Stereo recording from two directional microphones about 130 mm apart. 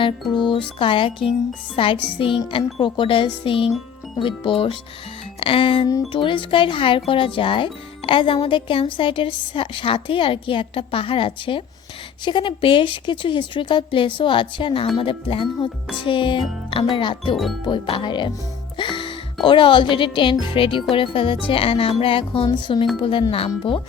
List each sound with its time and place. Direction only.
0.0 s speech: 40° left (ahead or behind)
17.3 s speech: centre (ahead or behind)
17.6 s speech: 40° left (ahead or behind)
18.8 s music: 40° left (ahead or behind)
19.5 s speech: 40° left (ahead or behind)